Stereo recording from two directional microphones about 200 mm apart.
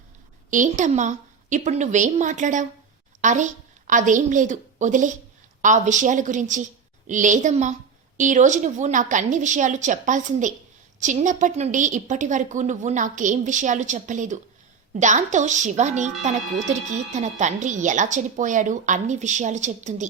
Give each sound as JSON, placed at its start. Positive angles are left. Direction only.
{"t": 0.5, "sound": "a woman's voice", "side_deg": -40}